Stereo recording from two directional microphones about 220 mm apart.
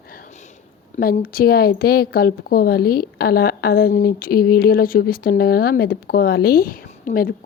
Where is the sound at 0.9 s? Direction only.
40° left (ahead or behind).